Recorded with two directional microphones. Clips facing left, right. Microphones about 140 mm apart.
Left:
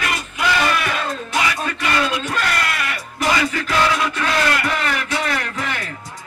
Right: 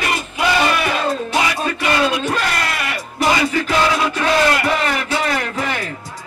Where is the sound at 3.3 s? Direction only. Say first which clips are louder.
Right 2 dB; 30° right (ahead or behind).